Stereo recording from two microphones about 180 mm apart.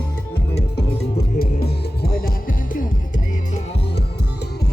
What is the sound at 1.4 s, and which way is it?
Music, 60° left (ahead or behind).